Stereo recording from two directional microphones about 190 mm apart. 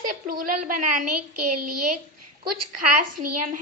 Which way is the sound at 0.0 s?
45° right (ahead or behind).